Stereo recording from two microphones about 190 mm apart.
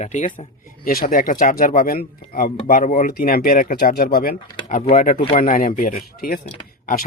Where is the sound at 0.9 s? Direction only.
50° left (ahead or behind).